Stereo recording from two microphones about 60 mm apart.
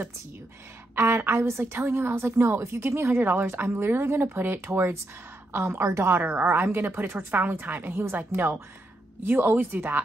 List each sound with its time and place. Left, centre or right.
0.9 s speech: right
6.2 s a woman's voice: right
7.9 s a woman's voice: right